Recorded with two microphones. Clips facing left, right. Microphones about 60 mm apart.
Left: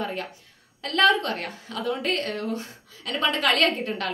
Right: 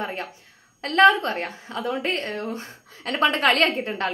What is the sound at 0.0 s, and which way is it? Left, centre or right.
A woman's voice, right.